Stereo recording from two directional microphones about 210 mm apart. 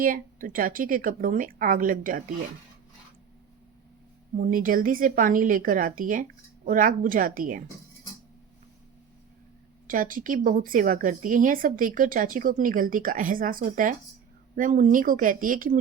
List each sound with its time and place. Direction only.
0.0 s speech: 40° right (ahead or behind)
4.4 s speech: 40° right (ahead or behind)
9.8 s speech: 40° right (ahead or behind)